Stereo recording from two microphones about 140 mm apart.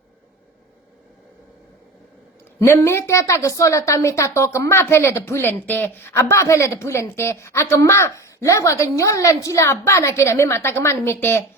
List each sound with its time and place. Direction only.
2.6 s a woman's voice: 20° left (ahead or behind)